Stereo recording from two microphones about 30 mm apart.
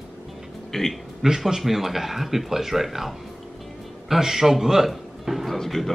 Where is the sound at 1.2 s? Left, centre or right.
Right.